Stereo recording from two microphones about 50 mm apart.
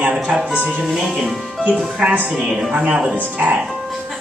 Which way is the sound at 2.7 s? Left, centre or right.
Centre.